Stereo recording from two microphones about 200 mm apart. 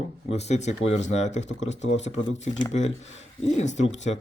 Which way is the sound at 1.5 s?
65° left (ahead or behind).